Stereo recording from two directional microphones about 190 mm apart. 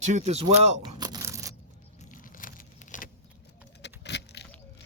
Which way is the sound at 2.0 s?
45° left (ahead or behind).